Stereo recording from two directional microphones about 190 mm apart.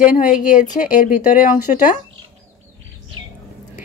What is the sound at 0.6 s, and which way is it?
A woman's voice, 45° left (ahead or behind).